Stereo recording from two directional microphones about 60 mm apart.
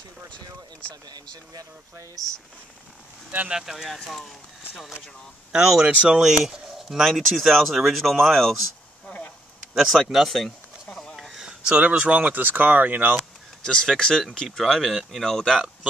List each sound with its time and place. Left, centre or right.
0.3 s speech: left
3.4 s speech: centre
5.5 s speech: centre
9.8 s speech: centre
10.9 s a sound: centre
11.3 s speech: centre
13.7 s speech: centre
14.6 s speech: centre